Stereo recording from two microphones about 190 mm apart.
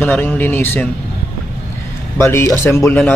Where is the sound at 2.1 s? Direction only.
15° left (ahead or behind).